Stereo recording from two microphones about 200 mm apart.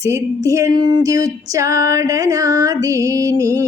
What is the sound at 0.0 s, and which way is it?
Female singing, 15° right (ahead or behind).